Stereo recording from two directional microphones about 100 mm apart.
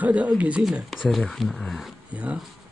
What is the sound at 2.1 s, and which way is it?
Speech, 15° right (ahead or behind).